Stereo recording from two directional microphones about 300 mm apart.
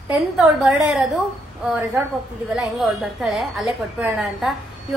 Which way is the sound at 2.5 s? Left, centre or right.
Centre.